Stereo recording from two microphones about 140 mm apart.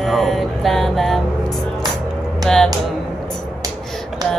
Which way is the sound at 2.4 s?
5° left (ahead or behind).